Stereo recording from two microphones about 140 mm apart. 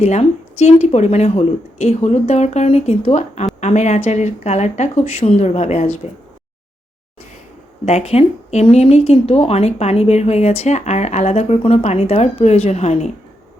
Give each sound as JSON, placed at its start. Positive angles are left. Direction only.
{"t": 0.0, "sound": "a woman's voice", "side_deg": 50}
{"t": 7.9, "sound": "a woman's voice", "side_deg": 45}